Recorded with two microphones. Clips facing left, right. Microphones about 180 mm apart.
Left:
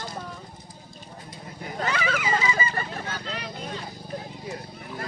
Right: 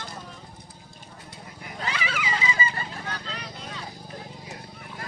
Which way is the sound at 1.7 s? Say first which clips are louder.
Left 4 dB; 45° left (ahead or behind).